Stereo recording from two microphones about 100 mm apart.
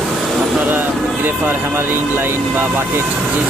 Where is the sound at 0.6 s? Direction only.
20° right (ahead or behind).